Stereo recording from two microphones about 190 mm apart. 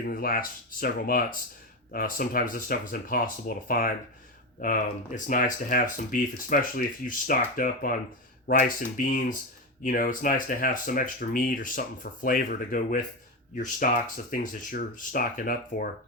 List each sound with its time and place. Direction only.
0.0 s speech: 50° left (ahead or behind)